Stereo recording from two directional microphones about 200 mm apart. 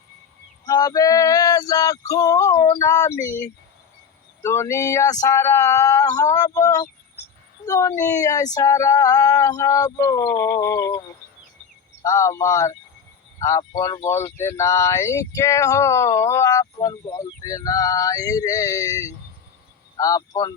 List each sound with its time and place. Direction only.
0.6 s male singing: 20° left (ahead or behind)
2.6 s speech: 15° left (ahead or behind)
4.4 s speech: 15° left (ahead or behind)
12.0 s speech: 15° left (ahead or behind)